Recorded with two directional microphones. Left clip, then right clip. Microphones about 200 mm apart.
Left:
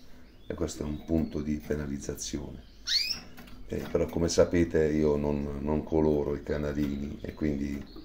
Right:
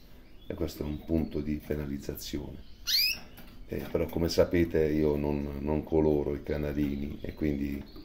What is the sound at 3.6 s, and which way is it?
Speech, centre (ahead or behind).